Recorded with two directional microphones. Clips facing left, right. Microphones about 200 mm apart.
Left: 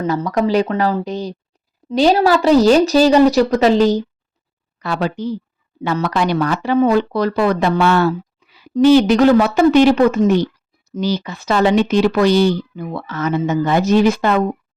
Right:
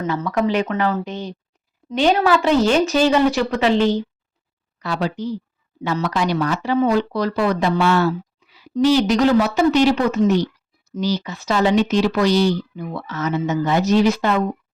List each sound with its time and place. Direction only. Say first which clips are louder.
0.0 s a woman's voice: left 3 dB; 35° left (ahead or behind)
4.8 s speech: left 3 dB; 55° left (ahead or behind)